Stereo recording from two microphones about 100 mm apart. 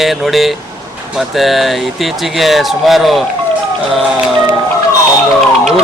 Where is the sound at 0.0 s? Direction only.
Centre (ahead or behind).